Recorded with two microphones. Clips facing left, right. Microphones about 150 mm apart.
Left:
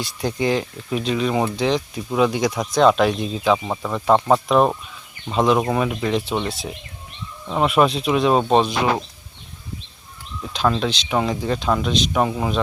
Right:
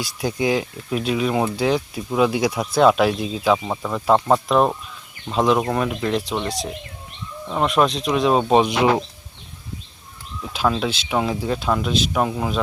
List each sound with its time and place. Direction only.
0.0 s speech: 5° right (ahead or behind)
8.6 s speech: 20° right (ahead or behind)
10.5 s speech: 5° right (ahead or behind)